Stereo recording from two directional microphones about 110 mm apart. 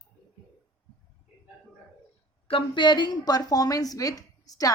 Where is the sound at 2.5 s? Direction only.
50° left (ahead or behind).